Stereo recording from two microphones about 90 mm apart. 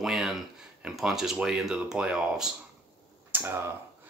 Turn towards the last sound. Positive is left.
turn(degrees=-30)  # may be behind; listen again after turning